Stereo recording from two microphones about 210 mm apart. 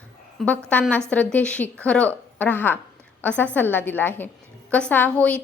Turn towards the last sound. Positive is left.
turn(degrees=5)  # may be behind; listen again after turning